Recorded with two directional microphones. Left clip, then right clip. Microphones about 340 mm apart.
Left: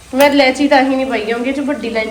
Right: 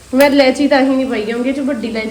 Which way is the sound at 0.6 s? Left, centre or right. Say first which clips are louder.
Left 1 dB; right.